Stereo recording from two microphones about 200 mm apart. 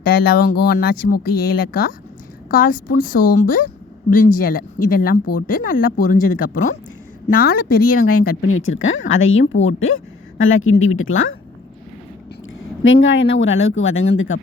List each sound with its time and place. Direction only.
0.0 s speech: 50° left (ahead or behind)
8.4 s a woman's voice: 90° left
12.8 s speech: 75° left (ahead or behind)